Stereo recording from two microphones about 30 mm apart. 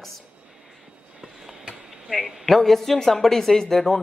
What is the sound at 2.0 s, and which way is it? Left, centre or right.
A woman's voice, centre.